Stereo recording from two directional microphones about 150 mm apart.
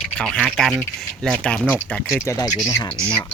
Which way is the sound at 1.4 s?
5° left (ahead or behind).